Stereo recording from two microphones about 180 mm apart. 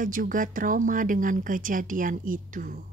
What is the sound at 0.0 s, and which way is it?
Speech, 50° right (ahead or behind).